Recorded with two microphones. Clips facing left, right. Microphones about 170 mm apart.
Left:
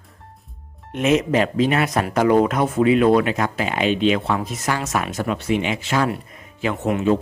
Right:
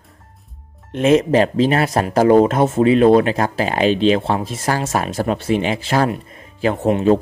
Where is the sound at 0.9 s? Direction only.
30° right (ahead or behind).